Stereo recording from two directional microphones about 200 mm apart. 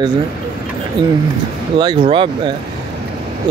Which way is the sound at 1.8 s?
25° right (ahead or behind).